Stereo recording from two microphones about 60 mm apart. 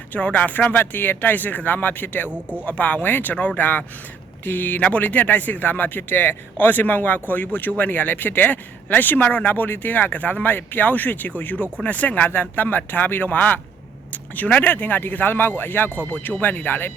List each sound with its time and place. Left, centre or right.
0.1 s a man's voice: left